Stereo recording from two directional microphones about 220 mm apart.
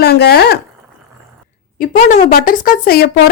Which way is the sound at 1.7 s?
35° left (ahead or behind).